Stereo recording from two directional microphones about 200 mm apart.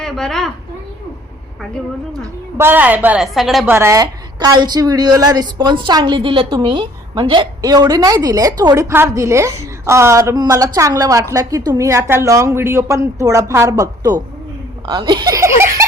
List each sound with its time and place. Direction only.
0.0 s a woman's voice: centre (ahead or behind)
2.6 s a woman's voice: 10° right (ahead or behind)
3.8 s a woman's voice: 15° right (ahead or behind)